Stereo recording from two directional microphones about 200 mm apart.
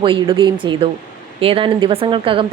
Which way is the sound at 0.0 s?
25° right (ahead or behind).